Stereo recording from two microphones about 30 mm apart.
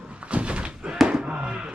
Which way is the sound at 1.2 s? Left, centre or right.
Right.